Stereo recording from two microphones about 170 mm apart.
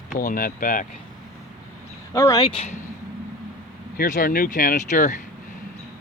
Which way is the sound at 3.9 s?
55° left (ahead or behind).